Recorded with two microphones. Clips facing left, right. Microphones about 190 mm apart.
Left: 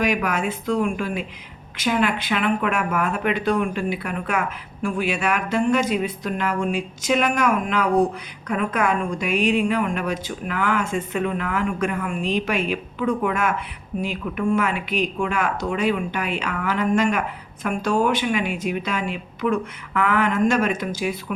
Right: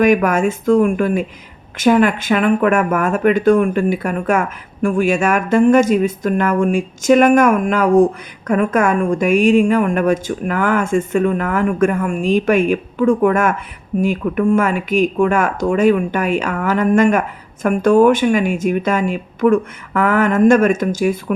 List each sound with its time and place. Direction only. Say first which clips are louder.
0.0 s speech: right 9 dB; 50° right (ahead or behind)